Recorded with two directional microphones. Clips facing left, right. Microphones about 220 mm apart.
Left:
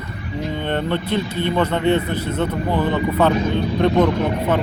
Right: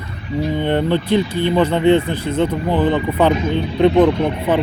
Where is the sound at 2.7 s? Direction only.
20° right (ahead or behind).